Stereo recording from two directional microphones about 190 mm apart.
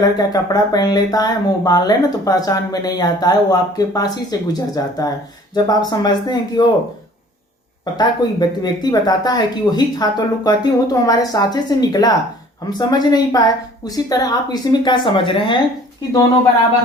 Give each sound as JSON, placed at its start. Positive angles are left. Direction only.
{"t": 0.0, "sound": "speech", "side_deg": 20}
{"t": 7.9, "sound": "speech", "side_deg": 20}